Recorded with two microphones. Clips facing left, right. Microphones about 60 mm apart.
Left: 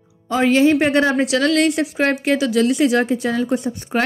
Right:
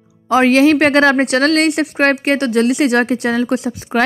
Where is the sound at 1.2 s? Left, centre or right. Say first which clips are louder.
Right 3 dB; right.